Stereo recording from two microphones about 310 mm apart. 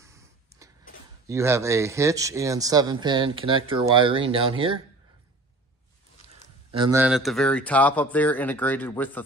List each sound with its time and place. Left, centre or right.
0.0 s a sound: centre
1.2 s speech: centre
6.7 s speech: centre